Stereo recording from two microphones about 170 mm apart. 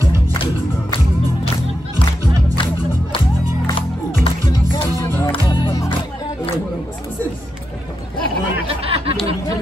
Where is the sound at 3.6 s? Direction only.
25° left (ahead or behind).